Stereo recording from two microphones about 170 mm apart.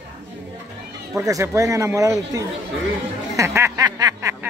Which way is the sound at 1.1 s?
15° right (ahead or behind).